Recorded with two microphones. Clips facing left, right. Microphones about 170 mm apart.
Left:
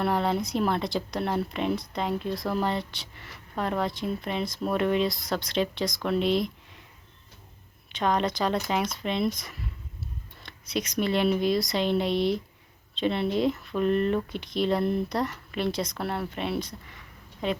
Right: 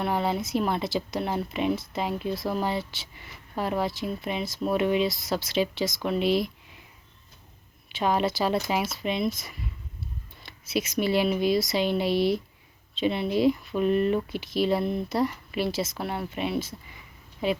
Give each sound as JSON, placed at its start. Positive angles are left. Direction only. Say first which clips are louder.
{"t": 0.0, "sound": "speech", "louder": "left 1 dB", "side_deg": 0}
{"t": 7.9, "sound": "speech", "louder": "right 1 dB", "side_deg": -5}